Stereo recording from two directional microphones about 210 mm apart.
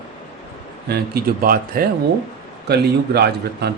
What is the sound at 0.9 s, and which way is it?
A man's voice, 45° right (ahead or behind).